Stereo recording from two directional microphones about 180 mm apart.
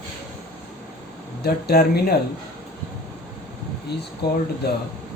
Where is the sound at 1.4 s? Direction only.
60° left (ahead or behind).